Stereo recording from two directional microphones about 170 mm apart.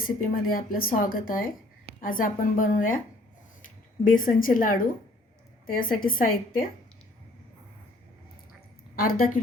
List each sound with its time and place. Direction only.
0.0 s a woman's voice: 55° left (ahead or behind)
9.0 s a woman's voice: 60° left (ahead or behind)